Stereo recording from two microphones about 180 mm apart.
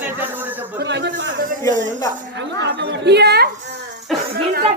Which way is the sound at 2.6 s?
70° right (ahead or behind).